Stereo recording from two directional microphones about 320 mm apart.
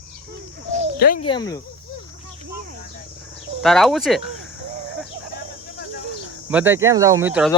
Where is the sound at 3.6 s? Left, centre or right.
Centre.